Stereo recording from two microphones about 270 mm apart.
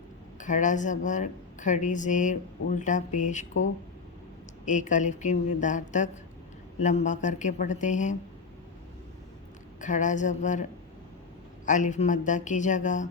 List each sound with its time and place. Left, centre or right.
0.3 s a woman's voice: left
4.6 s a woman's voice: left
9.8 s a woman's voice: left